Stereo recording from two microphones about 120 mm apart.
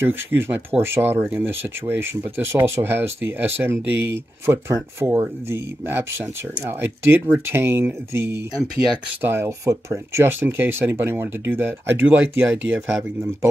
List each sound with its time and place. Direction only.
0.0 s speech: 20° right (ahead or behind)